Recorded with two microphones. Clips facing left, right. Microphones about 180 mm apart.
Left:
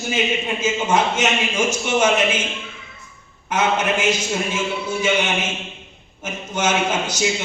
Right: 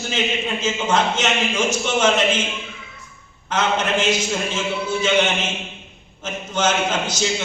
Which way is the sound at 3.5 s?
10° left (ahead or behind).